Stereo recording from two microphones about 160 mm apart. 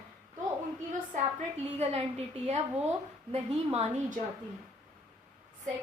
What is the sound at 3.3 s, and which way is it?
Speech, 40° right (ahead or behind).